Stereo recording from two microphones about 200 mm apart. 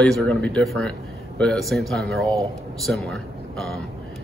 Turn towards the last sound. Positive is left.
turn(degrees=0)  # may be behind; listen again after turning